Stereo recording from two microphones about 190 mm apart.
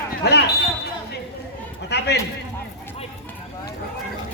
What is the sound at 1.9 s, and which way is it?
Speech, 60° left (ahead or behind).